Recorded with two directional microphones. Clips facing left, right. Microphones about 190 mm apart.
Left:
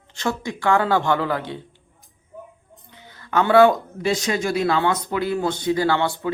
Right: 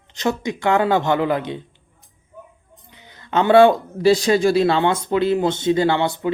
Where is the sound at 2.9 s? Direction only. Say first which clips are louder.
Right 2 dB; 15° right (ahead or behind).